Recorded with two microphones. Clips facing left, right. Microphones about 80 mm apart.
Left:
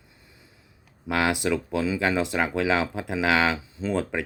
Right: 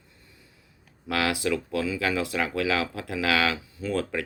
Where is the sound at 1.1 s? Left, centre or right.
Left.